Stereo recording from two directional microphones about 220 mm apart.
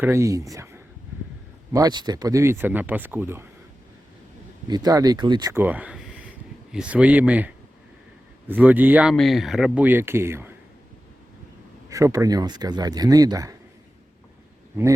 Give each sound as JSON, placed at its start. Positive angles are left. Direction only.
{"t": 0.0, "sound": "speech", "side_deg": -10}
{"t": 4.7, "sound": "speech", "side_deg": -15}
{"t": 11.9, "sound": "speech", "side_deg": -15}